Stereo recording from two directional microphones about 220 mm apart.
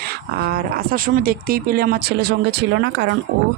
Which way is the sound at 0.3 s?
45° right (ahead or behind).